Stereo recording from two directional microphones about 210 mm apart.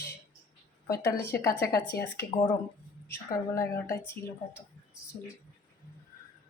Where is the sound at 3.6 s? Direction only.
10° left (ahead or behind).